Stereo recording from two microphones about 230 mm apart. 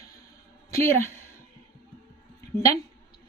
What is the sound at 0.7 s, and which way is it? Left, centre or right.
Speech, centre.